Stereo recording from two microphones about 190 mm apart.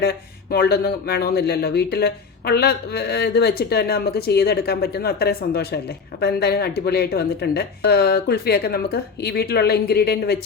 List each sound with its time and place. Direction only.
0.5 s speech: 55° left (ahead or behind)